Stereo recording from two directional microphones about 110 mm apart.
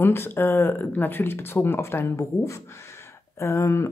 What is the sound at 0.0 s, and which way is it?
Speech, 20° left (ahead or behind).